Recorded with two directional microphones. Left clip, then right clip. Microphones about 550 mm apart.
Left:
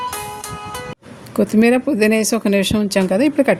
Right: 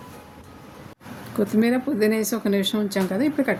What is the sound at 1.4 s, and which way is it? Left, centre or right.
Speech, centre.